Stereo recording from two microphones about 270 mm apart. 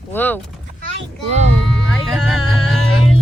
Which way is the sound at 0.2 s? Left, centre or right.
Centre.